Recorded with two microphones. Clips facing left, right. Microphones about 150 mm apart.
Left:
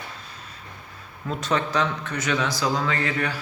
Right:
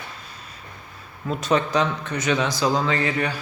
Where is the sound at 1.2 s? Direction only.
15° right (ahead or behind).